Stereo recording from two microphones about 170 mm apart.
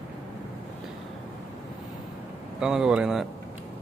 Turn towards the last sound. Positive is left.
turn(degrees=-5)  # may be behind; listen again after turning